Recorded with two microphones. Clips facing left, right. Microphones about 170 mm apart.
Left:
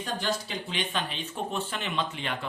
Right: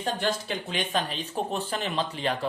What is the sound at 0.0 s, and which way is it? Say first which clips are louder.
Speech: right 3 dB; 55° right (ahead or behind).